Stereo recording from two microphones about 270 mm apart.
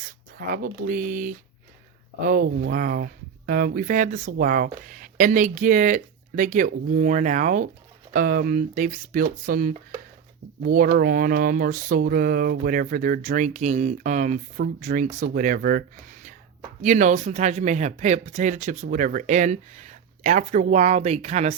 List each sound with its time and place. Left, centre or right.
0.3 s speech: right